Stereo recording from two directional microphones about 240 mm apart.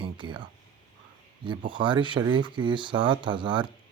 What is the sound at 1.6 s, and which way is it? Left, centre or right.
Speech, centre.